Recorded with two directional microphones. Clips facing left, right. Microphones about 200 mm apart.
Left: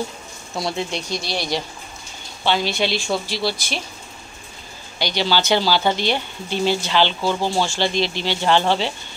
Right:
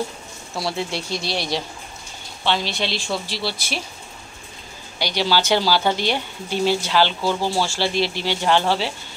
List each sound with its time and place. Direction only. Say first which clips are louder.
0.6 s speech: left 1 dB; 20° left (ahead or behind)
1.1 s speech: even; centre (ahead or behind)
4.9 s speech: even; 10° right (ahead or behind)
7.4 s speech: left 1 dB; 20° left (ahead or behind)
7.8 s speech: left 1 dB; 10° right (ahead or behind)